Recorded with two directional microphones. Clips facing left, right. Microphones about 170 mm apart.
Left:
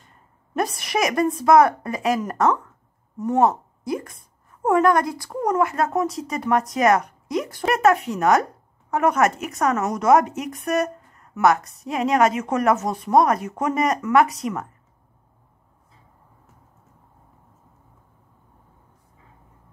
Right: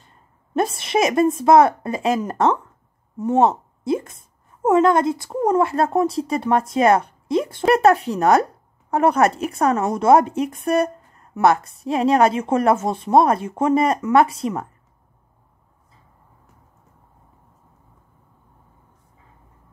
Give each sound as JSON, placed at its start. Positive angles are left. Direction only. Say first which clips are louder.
{"t": 0.6, "sound": "speech", "louder": "right 4 dB", "side_deg": -25}